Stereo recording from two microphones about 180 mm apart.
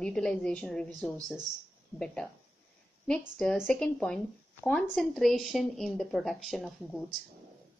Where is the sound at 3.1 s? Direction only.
5° left (ahead or behind).